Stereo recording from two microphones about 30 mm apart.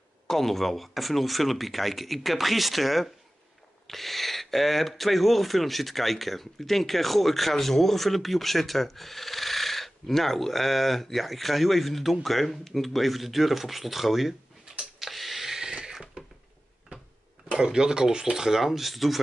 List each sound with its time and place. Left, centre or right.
0.3 s speech: centre
15.0 s a sound: centre; by 16.3 s right
17.6 s speech: right
18.7 s speech: centre